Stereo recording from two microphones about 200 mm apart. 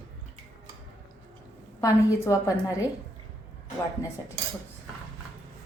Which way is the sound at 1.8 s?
15° left (ahead or behind).